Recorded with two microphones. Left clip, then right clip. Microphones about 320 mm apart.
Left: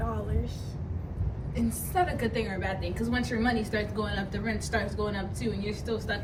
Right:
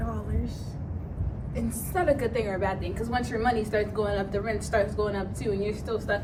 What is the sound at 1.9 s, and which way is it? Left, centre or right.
A woman's voice, centre.